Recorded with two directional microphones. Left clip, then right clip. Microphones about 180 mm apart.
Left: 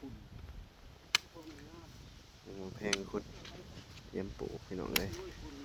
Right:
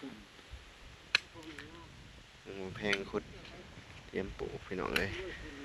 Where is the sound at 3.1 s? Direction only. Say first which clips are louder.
Right 2 dB; centre (ahead or behind).